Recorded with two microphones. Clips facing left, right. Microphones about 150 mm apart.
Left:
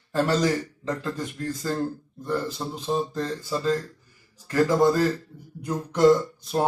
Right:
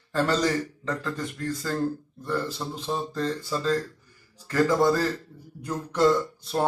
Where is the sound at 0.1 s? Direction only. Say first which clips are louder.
Left 2 dB; 10° left (ahead or behind).